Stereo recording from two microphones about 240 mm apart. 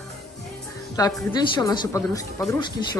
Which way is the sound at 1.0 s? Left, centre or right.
Centre.